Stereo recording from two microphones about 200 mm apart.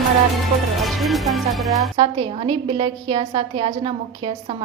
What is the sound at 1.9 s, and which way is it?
A woman's voice, 20° right (ahead or behind).